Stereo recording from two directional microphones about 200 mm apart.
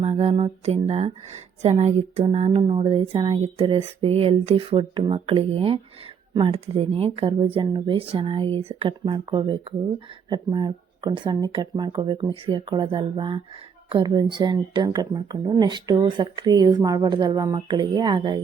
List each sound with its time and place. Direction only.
0.0 s speech: 30° right (ahead or behind)